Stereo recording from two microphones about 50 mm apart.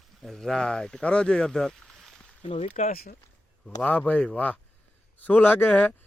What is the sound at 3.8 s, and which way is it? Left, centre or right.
Speech, left.